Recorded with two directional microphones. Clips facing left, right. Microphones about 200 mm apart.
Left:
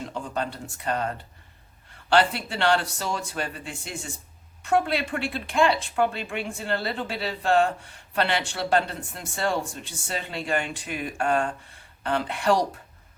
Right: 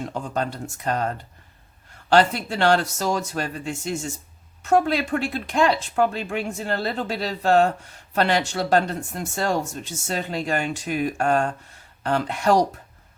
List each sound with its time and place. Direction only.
0.0 s speech: 45° right (ahead or behind)